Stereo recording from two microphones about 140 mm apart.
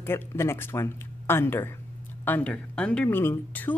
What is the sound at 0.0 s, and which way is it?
Speech, 15° left (ahead or behind).